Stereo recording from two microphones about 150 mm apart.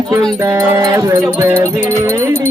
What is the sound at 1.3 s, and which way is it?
Music, 10° right (ahead or behind).